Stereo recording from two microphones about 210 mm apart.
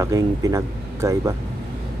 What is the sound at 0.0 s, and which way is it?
Speech, 15° right (ahead or behind).